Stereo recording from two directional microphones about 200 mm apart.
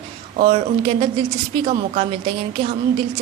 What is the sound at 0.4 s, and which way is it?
A woman's voice, 30° right (ahead or behind).